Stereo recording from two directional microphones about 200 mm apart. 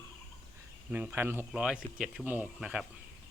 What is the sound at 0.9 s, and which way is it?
Speech, 10° right (ahead or behind).